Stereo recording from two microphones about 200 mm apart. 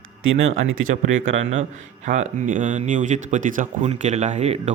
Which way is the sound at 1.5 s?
35° right (ahead or behind).